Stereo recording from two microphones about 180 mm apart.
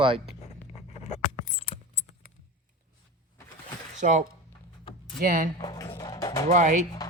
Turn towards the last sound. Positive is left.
turn(degrees=20)  # may be behind; listen again after turning